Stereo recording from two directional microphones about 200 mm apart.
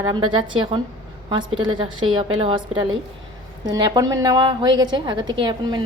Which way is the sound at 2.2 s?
25° right (ahead or behind).